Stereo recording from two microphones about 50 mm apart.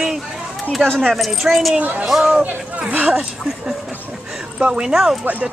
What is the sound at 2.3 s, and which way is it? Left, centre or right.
Speech, right.